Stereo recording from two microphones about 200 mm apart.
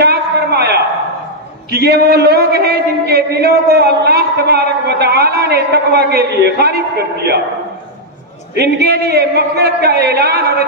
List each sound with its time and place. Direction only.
0.0 s a sound: 55° right (ahead or behind)
1.7 s a man's voice: 55° right (ahead or behind)
8.5 s a man's voice: 55° right (ahead or behind)